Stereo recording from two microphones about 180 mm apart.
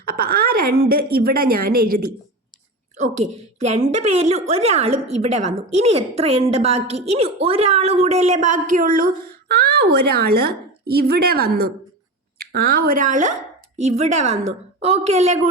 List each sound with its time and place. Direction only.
0.0 s a woman's voice: 55° right (ahead or behind)
3.6 s a woman's voice: 40° right (ahead or behind)
9.5 s a woman's voice: 60° right (ahead or behind); by 15.4 s 40° right (ahead or behind)